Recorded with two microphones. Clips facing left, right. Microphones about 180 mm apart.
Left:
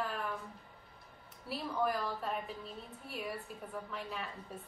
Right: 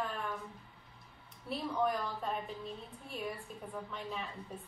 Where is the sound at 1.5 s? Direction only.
5° left (ahead or behind).